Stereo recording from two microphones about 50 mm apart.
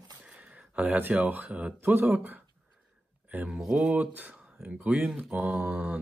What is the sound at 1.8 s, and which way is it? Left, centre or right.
Speech, right.